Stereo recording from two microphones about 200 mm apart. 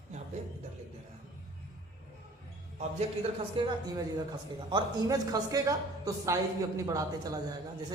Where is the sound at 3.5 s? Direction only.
25° right (ahead or behind).